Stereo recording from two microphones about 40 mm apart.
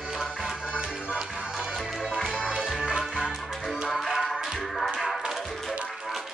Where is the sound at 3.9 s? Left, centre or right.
Centre.